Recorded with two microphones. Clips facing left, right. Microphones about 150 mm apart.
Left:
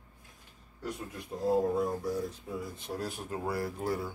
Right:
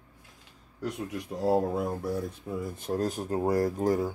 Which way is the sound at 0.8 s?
80° right.